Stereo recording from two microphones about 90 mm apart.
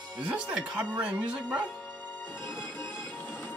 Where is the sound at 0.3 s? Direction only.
10° right (ahead or behind).